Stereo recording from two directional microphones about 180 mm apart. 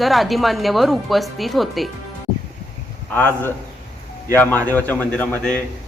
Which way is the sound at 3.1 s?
10° left (ahead or behind).